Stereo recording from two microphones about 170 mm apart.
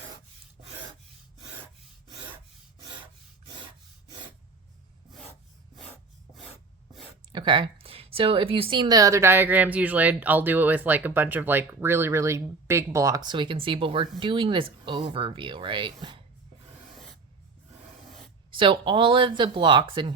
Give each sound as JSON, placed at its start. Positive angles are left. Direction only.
{"t": 7.3, "sound": "a woman's voice", "side_deg": -30}
{"t": 18.6, "sound": "speech", "side_deg": -30}